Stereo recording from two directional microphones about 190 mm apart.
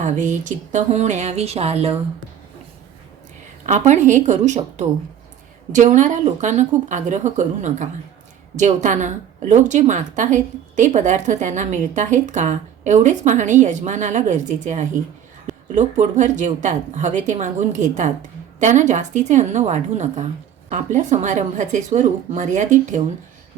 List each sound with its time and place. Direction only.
0.0 s a woman's voice: 40° right (ahead or behind)
3.7 s a woman's voice: 40° right (ahead or behind)